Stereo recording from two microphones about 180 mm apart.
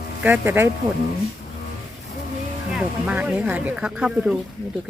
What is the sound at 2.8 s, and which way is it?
Speech, 5° right (ahead or behind).